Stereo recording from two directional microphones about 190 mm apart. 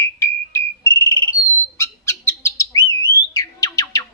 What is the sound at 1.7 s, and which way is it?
Bird, 15° left (ahead or behind).